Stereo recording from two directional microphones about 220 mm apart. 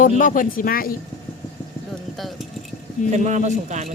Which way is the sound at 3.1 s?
35° right (ahead or behind).